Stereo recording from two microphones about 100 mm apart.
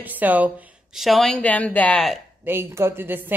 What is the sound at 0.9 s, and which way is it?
Speech, centre (ahead or behind).